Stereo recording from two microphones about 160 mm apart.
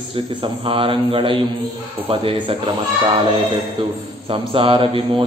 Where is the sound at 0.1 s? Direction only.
35° right (ahead or behind).